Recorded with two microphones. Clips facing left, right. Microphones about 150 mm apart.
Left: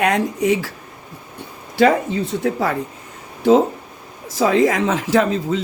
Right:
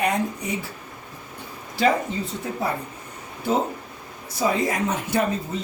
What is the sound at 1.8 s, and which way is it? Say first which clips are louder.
A woman's voice: left 6 dB; 75° left (ahead or behind).